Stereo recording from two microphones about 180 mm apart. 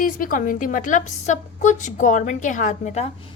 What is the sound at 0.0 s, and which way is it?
A woman's voice, 50° left (ahead or behind).